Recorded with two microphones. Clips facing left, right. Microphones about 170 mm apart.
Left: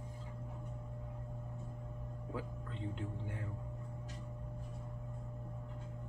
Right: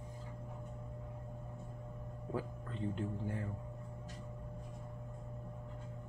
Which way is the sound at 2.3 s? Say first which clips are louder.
Right 3 dB; 40° right (ahead or behind).